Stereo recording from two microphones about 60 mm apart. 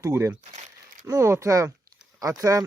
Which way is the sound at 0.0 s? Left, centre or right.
Right.